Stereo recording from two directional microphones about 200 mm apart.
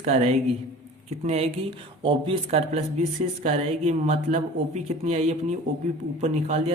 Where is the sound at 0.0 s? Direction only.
30° right (ahead or behind).